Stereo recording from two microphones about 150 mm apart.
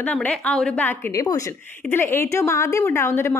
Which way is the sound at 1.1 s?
20° left (ahead or behind).